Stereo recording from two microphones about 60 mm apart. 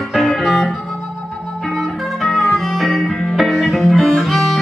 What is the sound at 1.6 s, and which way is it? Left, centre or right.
Music, centre.